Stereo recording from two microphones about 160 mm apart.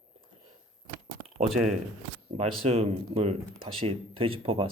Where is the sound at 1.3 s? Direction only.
50° right (ahead or behind).